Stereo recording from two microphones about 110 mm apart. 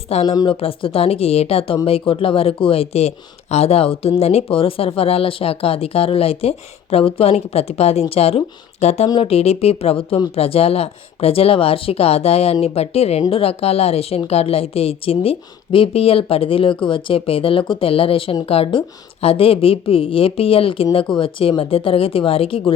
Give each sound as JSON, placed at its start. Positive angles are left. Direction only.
{"t": 0.1, "sound": "a woman's voice", "side_deg": 75}
{"t": 0.4, "sound": "a woman's voice", "side_deg": 60}